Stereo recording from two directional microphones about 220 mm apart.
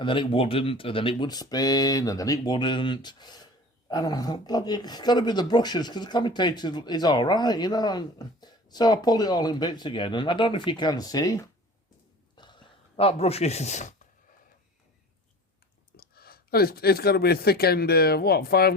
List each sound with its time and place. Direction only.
0.0 s speech: 20° left (ahead or behind)
12.4 s a sound: 20° left (ahead or behind)
15.9 s speech: 45° left (ahead or behind)